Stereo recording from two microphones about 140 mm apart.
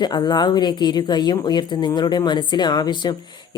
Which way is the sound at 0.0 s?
30° left (ahead or behind).